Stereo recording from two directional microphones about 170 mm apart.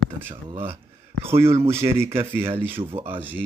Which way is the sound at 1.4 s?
15° right (ahead or behind).